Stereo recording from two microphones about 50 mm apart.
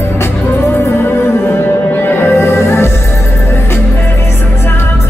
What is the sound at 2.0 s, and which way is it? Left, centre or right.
Music, left.